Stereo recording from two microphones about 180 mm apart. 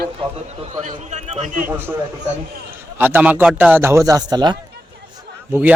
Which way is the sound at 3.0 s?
10° right (ahead or behind).